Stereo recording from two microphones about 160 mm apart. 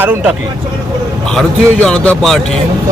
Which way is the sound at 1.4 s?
5° left (ahead or behind).